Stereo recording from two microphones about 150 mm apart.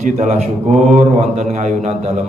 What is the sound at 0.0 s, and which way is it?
Mantra, 55° right (ahead or behind).